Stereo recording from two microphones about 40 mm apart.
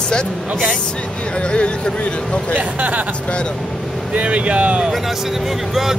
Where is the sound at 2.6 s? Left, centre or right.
Right.